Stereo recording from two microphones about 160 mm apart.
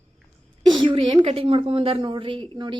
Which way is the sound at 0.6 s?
30° right (ahead or behind).